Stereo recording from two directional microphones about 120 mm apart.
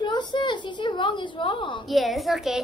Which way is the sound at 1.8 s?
Centre (ahead or behind).